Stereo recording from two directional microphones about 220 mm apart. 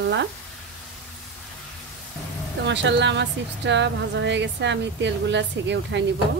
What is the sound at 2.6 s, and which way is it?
Speech, 50° right (ahead or behind).